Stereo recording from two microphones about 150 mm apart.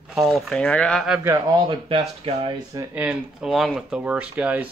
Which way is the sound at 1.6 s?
35° right (ahead or behind).